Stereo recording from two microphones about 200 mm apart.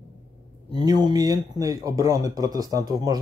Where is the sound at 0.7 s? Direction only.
20° right (ahead or behind).